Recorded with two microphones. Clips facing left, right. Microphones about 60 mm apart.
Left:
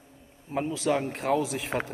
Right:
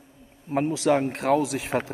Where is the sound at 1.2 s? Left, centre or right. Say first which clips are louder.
Right 4 dB; right.